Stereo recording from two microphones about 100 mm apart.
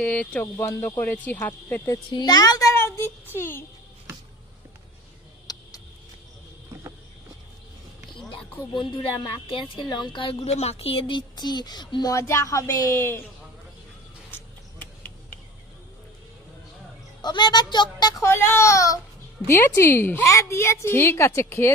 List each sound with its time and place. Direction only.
0.0 s speech: 10° left (ahead or behind)
0.6 s a woman's voice: 30° left (ahead or behind)
2.0 s speech: 45° left (ahead or behind)
2.7 s child singing: 25° left (ahead or behind)
5.5 s vehicle: 40° left (ahead or behind)
8.7 s speech: 55° left (ahead or behind)
10.4 s speech: 90° left; by 12.1 s 45° left (ahead or behind)
12.1 s speech: 30° left (ahead or behind)
17.2 s speech: 45° left (ahead or behind)
18.2 s a woman's voice: 25° left (ahead or behind)